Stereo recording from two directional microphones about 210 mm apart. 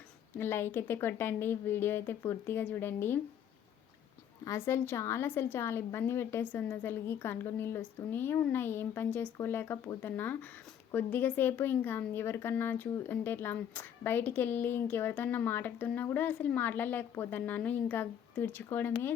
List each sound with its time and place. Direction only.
0.3 s a woman's voice: 10° left (ahead or behind)
4.4 s a woman's voice: 10° left (ahead or behind)